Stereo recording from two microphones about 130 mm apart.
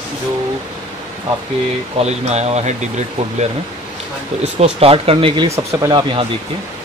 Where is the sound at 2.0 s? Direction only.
55° right (ahead or behind).